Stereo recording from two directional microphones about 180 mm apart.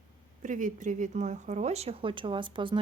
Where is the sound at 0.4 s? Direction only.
45° right (ahead or behind).